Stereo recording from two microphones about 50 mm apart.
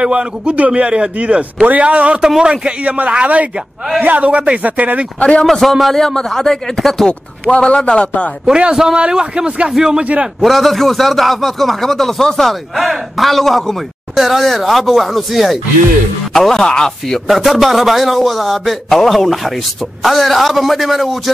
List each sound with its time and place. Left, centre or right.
0.0 s a man's voice: right
2.2 s a man's voice: centre
2.5 s a man's voice: right
5.2 s speech: left
5.5 s a man's voice: centre
7.1 s speech: centre
8.5 s a man's voice: centre
10.4 s a man's voice: centre
17.3 s a man's voice: centre